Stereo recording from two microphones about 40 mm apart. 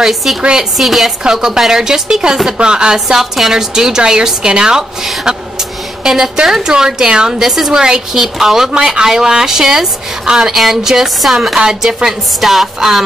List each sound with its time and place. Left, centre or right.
0.0 s a woman's voice: centre
1.2 s a woman's voice: centre
3.2 s a woman's voice: centre
6.0 s a woman's voice: centre
12.1 s a woman's voice: centre